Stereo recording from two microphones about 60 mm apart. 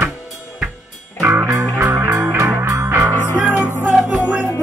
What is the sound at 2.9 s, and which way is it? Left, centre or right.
Music, right.